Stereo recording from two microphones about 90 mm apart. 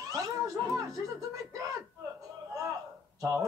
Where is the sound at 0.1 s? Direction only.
40° right (ahead or behind).